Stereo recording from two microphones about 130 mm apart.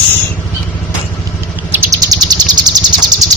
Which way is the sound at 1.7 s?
30° right (ahead or behind).